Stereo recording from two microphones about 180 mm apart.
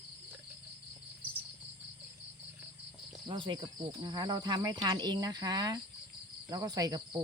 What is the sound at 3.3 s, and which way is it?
Speech, 30° right (ahead or behind).